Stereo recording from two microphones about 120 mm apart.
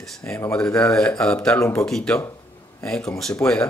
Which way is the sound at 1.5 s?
25° left (ahead or behind).